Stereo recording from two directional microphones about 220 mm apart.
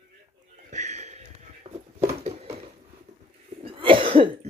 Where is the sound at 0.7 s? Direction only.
30° right (ahead or behind).